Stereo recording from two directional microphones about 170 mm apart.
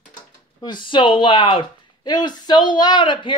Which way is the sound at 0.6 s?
25° left (ahead or behind).